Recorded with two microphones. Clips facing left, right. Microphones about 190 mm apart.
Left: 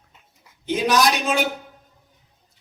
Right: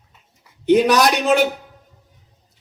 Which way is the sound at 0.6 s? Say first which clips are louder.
Right 6 dB; 60° right (ahead or behind).